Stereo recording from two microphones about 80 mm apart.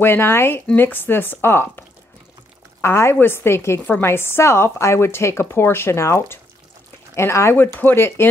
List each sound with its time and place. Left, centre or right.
0.0 s speech: left